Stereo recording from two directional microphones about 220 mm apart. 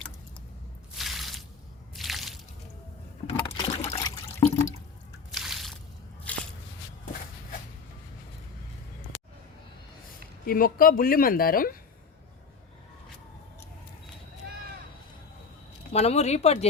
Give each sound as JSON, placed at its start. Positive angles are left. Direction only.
{"t": 0.9, "sound": "water", "side_deg": 0}
{"t": 2.0, "sound": "squish", "side_deg": 0}
{"t": 3.2, "sound": "trickle", "side_deg": 25}
{"t": 5.3, "sound": "a sound", "side_deg": 0}
{"t": 10.4, "sound": "speech", "side_deg": 40}
{"t": 15.9, "sound": "speech", "side_deg": 30}